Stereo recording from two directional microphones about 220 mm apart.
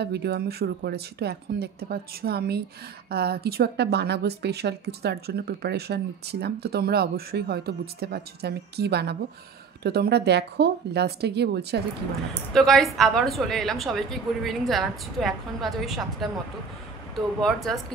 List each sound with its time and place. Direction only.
0.0 s a woman's voice: 50° right (ahead or behind)
12.5 s a woman's voice: centre (ahead or behind)
17.4 s a woman's voice: centre (ahead or behind)